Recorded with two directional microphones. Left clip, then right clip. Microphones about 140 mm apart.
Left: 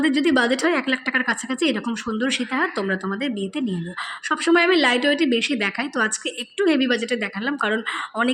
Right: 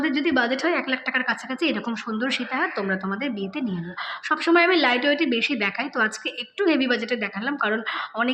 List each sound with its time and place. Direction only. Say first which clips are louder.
0.0 s a woman's voice: left 3 dB; 30° left (ahead or behind)